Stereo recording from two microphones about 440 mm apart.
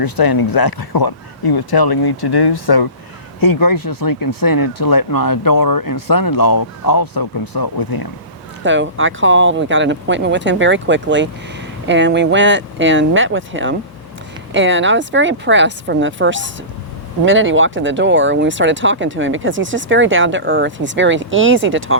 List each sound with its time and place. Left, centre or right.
0.0 s speech: left
8.6 s speech: right